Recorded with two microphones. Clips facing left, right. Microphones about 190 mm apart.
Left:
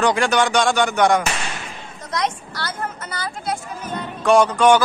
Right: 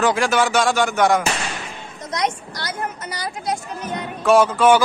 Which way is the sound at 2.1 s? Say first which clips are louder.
Even; 15° right (ahead or behind).